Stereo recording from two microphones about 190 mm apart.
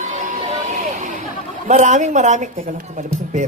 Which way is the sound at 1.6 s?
40° right (ahead or behind).